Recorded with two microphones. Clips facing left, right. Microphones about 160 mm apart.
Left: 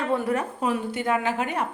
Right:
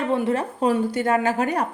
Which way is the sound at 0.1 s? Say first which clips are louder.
Right 2 dB; 25° right (ahead or behind).